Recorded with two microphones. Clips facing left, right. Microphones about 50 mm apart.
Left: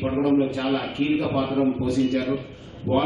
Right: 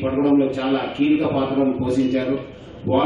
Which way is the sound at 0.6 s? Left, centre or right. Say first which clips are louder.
Right 4 dB; right.